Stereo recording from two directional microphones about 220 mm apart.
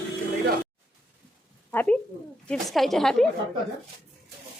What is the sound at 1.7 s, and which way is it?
A woman's voice, 5° left (ahead or behind).